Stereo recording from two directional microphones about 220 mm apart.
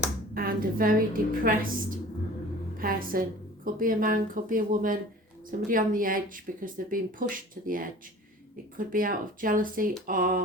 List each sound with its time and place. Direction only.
0.3 s a woman's voice: 40° right (ahead or behind)